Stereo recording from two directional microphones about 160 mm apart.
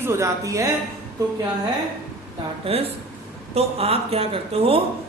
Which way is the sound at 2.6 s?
35° right (ahead or behind).